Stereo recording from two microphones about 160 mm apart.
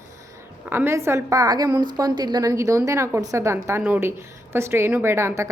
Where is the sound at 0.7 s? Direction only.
15° right (ahead or behind).